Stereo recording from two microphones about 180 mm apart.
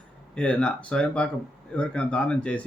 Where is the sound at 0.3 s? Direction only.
5° left (ahead or behind).